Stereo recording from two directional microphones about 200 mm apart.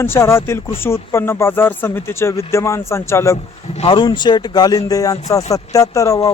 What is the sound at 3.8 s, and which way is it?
A man's voice, 25° left (ahead or behind).